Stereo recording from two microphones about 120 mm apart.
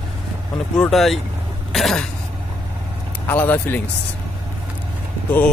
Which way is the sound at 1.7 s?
5° left (ahead or behind).